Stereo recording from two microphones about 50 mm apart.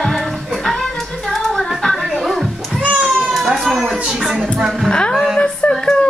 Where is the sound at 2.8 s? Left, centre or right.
Right.